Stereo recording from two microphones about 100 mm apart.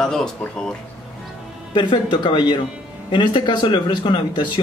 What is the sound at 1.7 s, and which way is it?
Speech, 55° left (ahead or behind).